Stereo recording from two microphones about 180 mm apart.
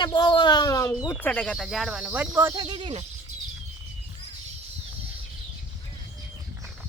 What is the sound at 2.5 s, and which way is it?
Speech, 25° right (ahead or behind).